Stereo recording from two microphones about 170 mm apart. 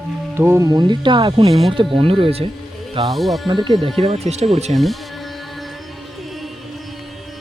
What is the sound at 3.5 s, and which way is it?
Speech, 25° right (ahead or behind).